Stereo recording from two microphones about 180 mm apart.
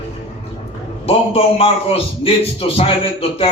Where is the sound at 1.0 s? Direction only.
35° left (ahead or behind).